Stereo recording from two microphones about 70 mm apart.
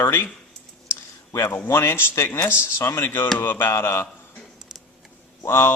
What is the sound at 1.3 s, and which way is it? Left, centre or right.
Speech, left.